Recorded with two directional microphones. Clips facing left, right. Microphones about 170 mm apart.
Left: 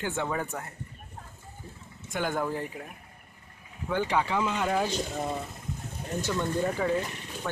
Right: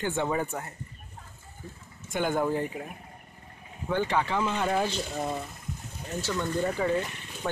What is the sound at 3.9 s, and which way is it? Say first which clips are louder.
Speech: even; 10° left (ahead or behind).